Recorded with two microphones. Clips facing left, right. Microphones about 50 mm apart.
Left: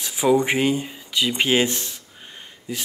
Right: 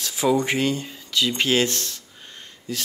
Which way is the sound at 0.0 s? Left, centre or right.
Centre.